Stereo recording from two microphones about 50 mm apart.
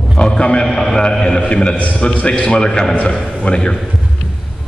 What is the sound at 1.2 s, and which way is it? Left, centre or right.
Speech, centre.